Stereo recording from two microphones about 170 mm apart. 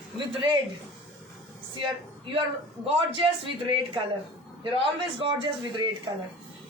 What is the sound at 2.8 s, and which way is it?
Speech, 30° right (ahead or behind).